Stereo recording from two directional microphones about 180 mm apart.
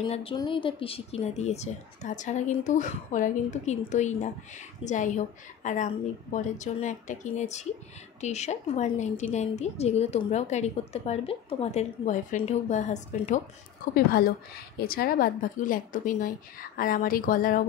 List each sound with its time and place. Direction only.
0.0 s speech: 30° left (ahead or behind)
13.9 s speech: 55° left (ahead or behind)